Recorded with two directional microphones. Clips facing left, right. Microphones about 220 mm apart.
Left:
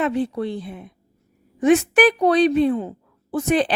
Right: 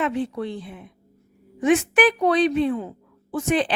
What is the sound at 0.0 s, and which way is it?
A woman's voice, 35° left (ahead or behind).